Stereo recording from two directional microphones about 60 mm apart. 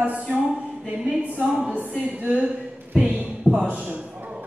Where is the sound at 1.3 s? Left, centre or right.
Centre.